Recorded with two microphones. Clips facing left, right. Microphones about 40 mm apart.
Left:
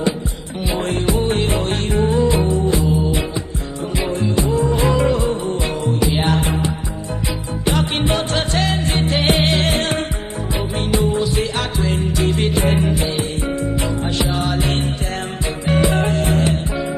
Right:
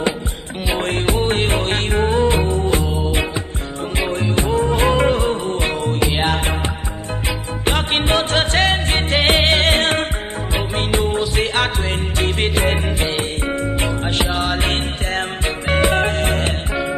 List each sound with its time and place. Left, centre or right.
0.7 s music: right
4.2 s music: right
7.6 s music: right